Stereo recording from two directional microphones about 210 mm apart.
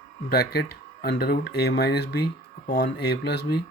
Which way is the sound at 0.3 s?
50° left (ahead or behind).